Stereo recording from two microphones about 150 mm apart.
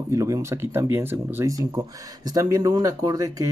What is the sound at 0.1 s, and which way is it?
Speech, 20° right (ahead or behind).